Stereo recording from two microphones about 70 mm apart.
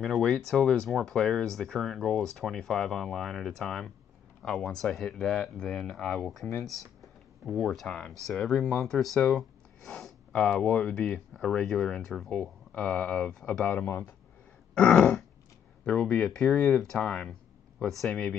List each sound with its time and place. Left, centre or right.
0.0 s speech: centre
6.6 s computer keyboard: centre
7.6 s speech: centre
13.7 s speech: left
14.7 s throat clearing: centre
15.8 s speech: centre